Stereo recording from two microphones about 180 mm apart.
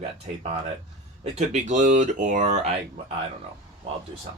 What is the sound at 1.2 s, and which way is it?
Speech, 40° right (ahead or behind).